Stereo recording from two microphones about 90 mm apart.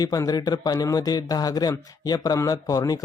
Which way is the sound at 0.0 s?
45° left (ahead or behind).